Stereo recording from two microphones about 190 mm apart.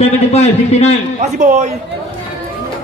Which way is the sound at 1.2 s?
40° right (ahead or behind).